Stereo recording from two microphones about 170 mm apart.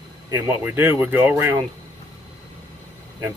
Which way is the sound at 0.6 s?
10° right (ahead or behind).